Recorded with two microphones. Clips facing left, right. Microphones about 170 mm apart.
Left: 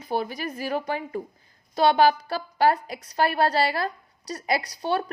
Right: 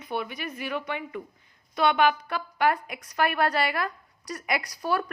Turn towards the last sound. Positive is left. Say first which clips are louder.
# left 2 dB
turn(degrees=25)  # may be behind; listen again after turning